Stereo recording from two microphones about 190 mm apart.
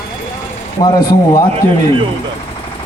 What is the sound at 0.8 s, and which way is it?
Speech, 20° left (ahead or behind).